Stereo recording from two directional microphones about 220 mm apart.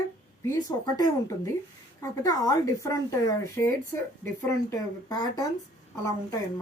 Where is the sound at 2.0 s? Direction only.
15° left (ahead or behind).